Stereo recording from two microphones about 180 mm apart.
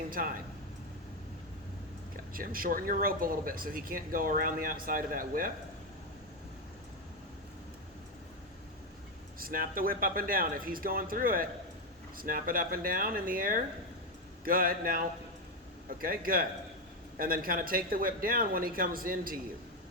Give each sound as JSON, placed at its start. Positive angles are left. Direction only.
{"t": 0.1, "sound": "speech", "side_deg": -50}
{"t": 2.3, "sound": "speech", "side_deg": -55}
{"t": 9.4, "sound": "speech", "side_deg": -50}